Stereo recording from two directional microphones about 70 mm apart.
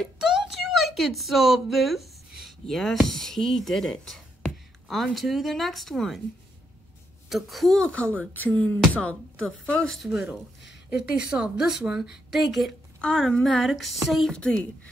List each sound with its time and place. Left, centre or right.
0.0 s speech: centre
7.2 s speech: centre
7.8 s speech: centre
9.9 s speech: centre
10.9 s a woman's voice: centre
14.3 s speech: centre